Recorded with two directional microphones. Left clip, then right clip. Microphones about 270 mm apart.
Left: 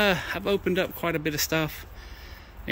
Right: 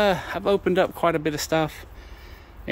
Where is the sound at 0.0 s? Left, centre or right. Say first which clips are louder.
Right 3 dB; centre.